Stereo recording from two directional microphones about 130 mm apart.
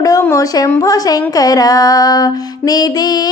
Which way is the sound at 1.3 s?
30° left (ahead or behind).